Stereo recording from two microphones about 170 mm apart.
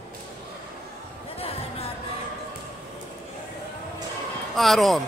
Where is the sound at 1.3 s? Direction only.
35° left (ahead or behind).